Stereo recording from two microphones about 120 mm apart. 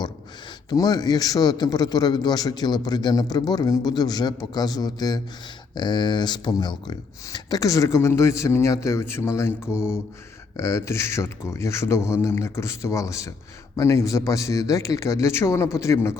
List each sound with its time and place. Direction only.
0.7 s a man's voice: 35° left (ahead or behind)